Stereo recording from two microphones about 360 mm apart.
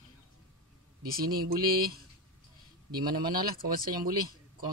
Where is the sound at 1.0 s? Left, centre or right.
Right.